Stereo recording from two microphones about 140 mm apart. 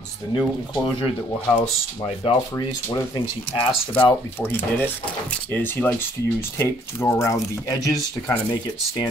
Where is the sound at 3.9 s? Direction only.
15° left (ahead or behind).